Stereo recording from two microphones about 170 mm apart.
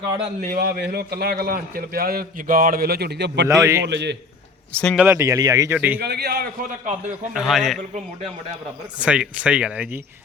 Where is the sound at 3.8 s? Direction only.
90° right.